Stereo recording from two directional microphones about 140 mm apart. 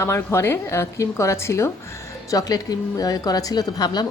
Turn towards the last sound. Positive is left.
turn(degrees=30)  # may be behind; listen again after turning